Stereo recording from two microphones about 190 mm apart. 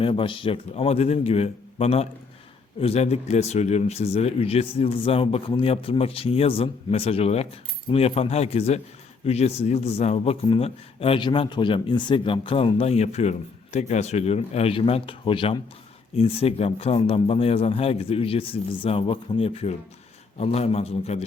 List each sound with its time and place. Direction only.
0.0 s speech: 25° left (ahead or behind)